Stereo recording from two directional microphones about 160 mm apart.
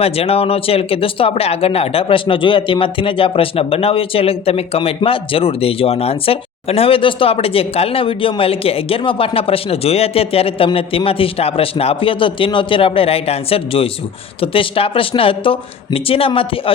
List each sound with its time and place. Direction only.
0.0 s speech: 40° left (ahead or behind)